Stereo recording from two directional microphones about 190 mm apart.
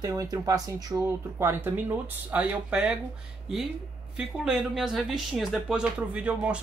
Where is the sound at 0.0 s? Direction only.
20° right (ahead or behind).